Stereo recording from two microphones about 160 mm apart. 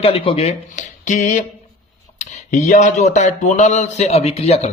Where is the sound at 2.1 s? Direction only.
50° left (ahead or behind).